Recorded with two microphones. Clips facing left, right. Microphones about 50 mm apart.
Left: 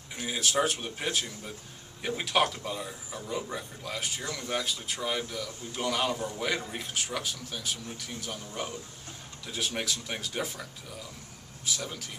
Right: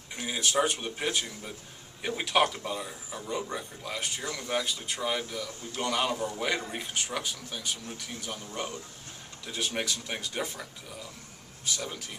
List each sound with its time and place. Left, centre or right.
0.1 s a man's voice: centre